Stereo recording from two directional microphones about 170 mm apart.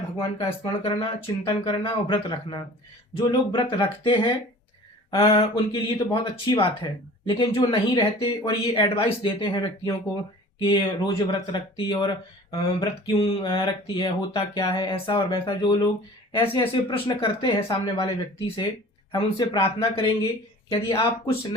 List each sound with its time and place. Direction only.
0.3 s speech: 30° left (ahead or behind)